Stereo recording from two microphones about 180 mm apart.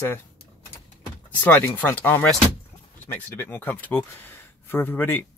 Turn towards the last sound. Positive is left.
turn(degrees=10)  # may be behind; listen again after turning